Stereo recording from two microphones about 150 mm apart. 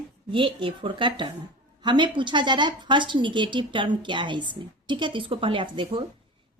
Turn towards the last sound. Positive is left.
turn(degrees=-35)  # may be behind; listen again after turning